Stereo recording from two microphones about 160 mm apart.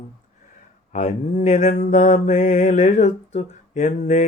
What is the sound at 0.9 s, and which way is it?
Mantra, 45° left (ahead or behind).